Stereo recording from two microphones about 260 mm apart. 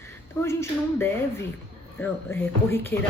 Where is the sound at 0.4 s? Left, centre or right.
Centre.